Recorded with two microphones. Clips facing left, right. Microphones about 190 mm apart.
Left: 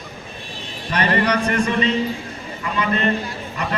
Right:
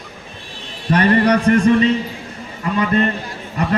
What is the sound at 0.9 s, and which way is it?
A man's voice, 45° right (ahead or behind).